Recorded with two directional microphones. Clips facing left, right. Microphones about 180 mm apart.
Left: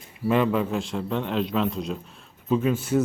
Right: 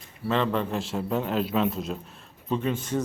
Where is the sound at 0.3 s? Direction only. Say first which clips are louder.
Left 3 dB; 10° left (ahead or behind).